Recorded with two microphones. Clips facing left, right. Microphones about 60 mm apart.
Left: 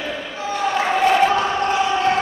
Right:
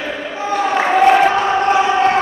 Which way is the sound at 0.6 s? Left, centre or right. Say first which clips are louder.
Right 5 dB; right.